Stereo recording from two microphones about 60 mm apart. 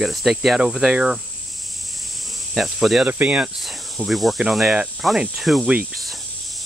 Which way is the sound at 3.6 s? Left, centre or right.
Centre.